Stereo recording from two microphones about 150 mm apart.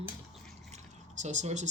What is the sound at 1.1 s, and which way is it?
Speech, 50° right (ahead or behind).